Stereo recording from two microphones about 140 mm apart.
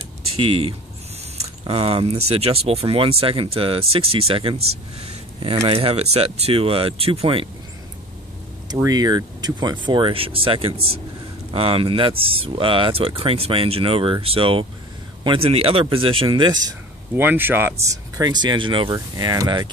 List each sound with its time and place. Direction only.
0.4 s speech: 40° right (ahead or behind)
5.7 s speech: 45° right (ahead or behind)
8.7 s speech: 25° right (ahead or behind)
17.1 s speech: 15° right (ahead or behind); by 18.9 s 40° right (ahead or behind)
18.9 s speech: 25° right (ahead or behind)